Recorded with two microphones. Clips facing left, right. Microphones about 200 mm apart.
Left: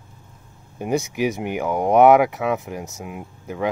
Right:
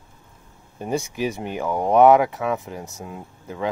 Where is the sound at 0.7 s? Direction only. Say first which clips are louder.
Left 3 dB; 15° left (ahead or behind).